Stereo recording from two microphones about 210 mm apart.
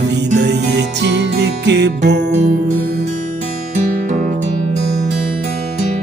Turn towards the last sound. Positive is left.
turn(degrees=-40)  # may be behind; listen again after turning